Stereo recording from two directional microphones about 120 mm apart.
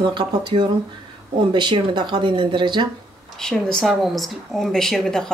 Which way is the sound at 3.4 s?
5° left (ahead or behind).